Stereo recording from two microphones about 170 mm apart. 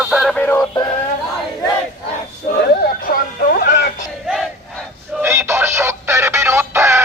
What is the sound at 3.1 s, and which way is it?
Music, 60° left (ahead or behind).